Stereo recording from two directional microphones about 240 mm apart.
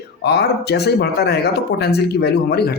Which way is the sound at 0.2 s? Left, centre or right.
Left.